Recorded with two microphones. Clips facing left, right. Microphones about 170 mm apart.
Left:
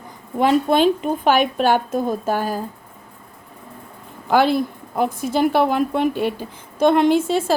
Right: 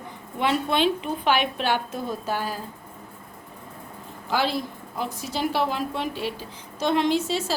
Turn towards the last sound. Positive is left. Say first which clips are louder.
# left 7 dB
turn(degrees=55)  # may be behind; listen again after turning